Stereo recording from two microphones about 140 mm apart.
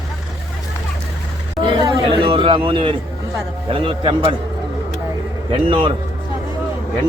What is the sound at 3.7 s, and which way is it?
Speech, 40° right (ahead or behind).